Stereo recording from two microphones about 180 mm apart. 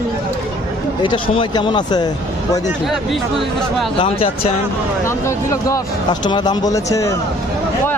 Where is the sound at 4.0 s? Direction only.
30° left (ahead or behind).